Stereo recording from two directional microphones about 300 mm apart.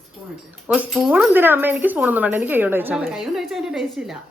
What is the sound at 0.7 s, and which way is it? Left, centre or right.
Speech, centre.